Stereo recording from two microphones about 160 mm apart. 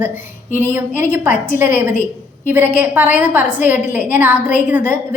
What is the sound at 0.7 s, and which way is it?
A woman's voice, 15° right (ahead or behind).